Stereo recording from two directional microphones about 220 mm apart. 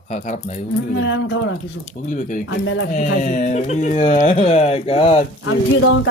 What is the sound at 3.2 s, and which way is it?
Speech, 35° left (ahead or behind).